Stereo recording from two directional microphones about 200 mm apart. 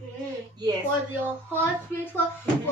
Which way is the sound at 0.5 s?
20° right (ahead or behind).